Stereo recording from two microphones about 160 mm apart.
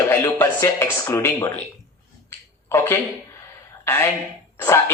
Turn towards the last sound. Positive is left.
turn(degrees=15)  # may be behind; listen again after turning